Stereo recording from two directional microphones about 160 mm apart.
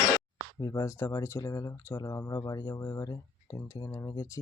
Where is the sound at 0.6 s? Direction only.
20° left (ahead or behind).